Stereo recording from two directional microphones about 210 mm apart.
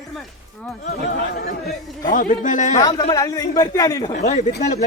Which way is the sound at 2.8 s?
20° left (ahead or behind).